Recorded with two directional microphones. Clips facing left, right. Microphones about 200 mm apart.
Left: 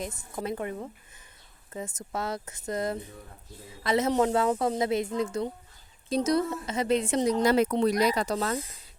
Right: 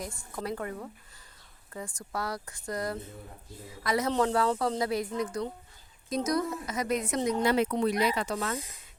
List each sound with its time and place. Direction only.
0.0 s speech: 20° left (ahead or behind)
7.4 s speech: 40° left (ahead or behind)